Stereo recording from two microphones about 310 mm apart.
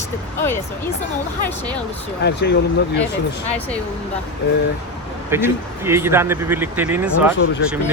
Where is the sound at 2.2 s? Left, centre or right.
Left.